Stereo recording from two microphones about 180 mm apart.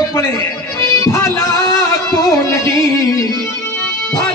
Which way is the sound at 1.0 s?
15° left (ahead or behind).